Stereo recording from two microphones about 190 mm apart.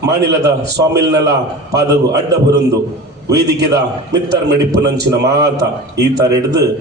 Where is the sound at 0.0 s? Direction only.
60° right (ahead or behind).